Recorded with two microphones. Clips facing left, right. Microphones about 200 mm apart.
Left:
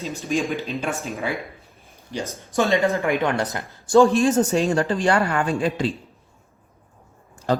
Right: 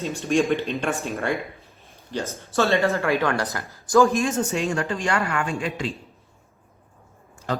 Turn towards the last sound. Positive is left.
turn(degrees=35)  # may be behind; listen again after turning